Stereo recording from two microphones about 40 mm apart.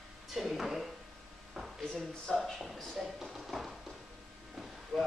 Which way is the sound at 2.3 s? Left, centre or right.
Centre.